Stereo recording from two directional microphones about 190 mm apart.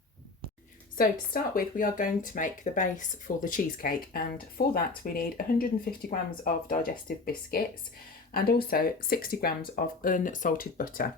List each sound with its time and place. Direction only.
0.9 s speech: 45° left (ahead or behind)
8.3 s speech: 50° left (ahead or behind)